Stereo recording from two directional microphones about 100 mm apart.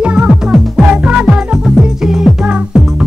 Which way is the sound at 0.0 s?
10° right (ahead or behind).